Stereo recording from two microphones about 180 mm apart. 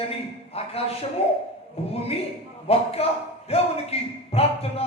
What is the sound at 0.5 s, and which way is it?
Speech, 35° left (ahead or behind).